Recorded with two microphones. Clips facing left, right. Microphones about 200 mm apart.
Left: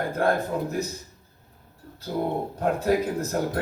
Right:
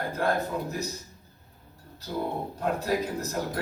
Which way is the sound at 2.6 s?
50° left (ahead or behind).